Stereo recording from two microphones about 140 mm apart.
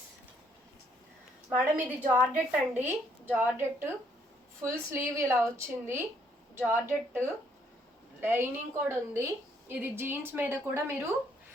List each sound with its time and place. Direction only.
1.5 s a woman's voice: 10° right (ahead or behind)